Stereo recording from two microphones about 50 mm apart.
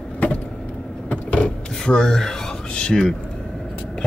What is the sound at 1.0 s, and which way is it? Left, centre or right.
Vehicle, left.